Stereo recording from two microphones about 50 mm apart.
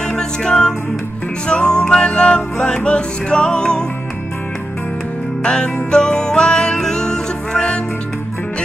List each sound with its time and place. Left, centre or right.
0.0 s music: centre
5.4 s music: centre